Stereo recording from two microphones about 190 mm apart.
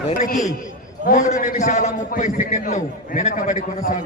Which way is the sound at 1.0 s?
45° left (ahead or behind).